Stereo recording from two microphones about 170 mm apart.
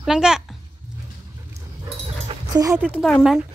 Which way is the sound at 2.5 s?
20° right (ahead or behind).